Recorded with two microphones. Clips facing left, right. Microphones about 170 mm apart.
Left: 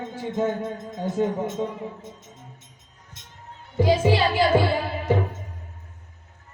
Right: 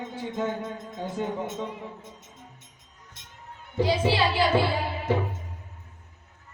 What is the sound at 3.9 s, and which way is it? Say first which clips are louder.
Speech: left 5 dB; 45° left (ahead or behind).